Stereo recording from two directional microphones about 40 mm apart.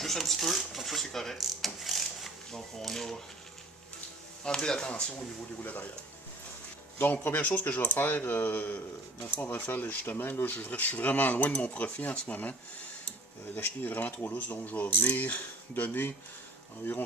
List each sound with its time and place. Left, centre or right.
0.0 s speech: centre
1.4 s a sound: centre
2.5 s speech: centre
4.4 s speech: centre
7.0 s speech: left
7.9 s speech: left
10.2 s speech: left
13.8 s speech: left
14.3 s speech: left